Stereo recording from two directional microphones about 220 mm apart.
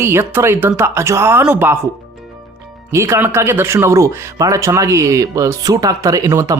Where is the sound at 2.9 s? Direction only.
10° right (ahead or behind).